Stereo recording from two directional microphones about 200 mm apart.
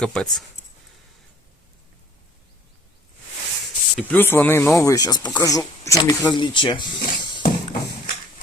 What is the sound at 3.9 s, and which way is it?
Speech, 10° left (ahead or behind).